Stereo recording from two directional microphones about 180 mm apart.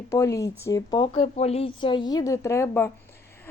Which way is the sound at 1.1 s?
40° left (ahead or behind).